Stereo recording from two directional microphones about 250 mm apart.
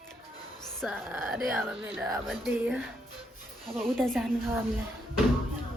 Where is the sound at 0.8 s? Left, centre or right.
Centre.